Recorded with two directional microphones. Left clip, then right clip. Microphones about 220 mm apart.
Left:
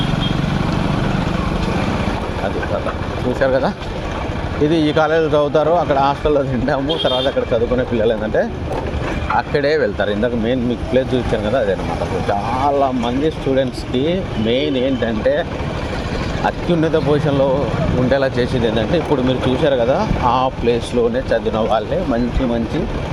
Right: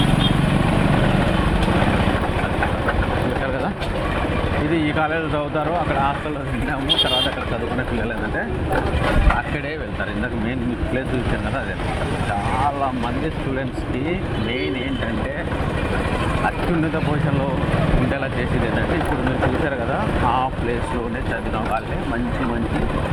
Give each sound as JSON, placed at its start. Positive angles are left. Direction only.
{"t": 4.7, "sound": "speech", "side_deg": 60}
{"t": 9.6, "sound": "speech", "side_deg": 60}
{"t": 19.6, "sound": "speech", "side_deg": 55}